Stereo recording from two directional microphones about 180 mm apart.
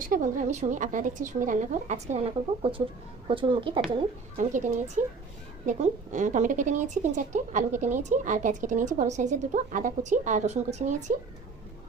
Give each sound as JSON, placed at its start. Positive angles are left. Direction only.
{"t": 0.0, "sound": "a woman's voice", "side_deg": -45}
{"t": 4.4, "sound": "a woman's voice", "side_deg": -45}